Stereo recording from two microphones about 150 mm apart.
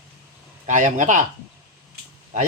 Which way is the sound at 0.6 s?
55° right (ahead or behind).